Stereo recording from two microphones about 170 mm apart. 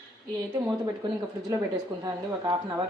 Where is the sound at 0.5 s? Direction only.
20° right (ahead or behind).